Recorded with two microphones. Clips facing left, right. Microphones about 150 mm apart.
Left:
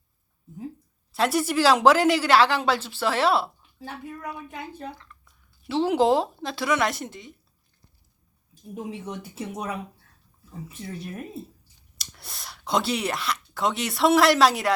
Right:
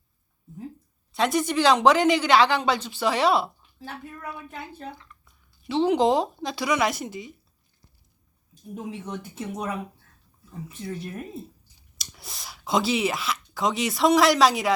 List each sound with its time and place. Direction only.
1.1 s a woman's voice: 5° left (ahead or behind)
3.8 s speech: 10° left (ahead or behind)
4.9 s speech: 5° right (ahead or behind)
8.7 s a woman's voice: 5° left (ahead or behind)
10.7 s a woman's voice: centre (ahead or behind)